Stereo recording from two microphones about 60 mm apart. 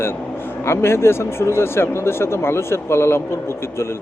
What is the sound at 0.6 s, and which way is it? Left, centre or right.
Speech, left.